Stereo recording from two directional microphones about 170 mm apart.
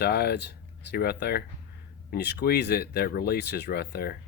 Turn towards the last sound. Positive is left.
turn(degrees=65)  # may be behind; listen again after turning